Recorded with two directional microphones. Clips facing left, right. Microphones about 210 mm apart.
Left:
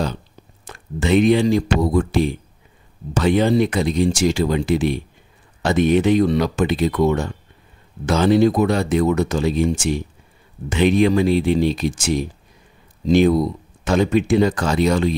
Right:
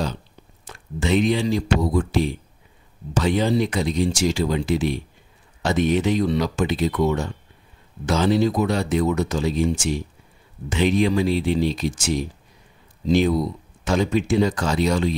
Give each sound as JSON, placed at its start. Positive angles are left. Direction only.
{"t": 0.7, "sound": "speech", "side_deg": 55}